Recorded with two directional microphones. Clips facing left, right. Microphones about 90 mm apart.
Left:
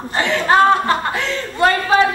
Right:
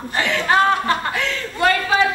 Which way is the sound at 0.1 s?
30° left (ahead or behind).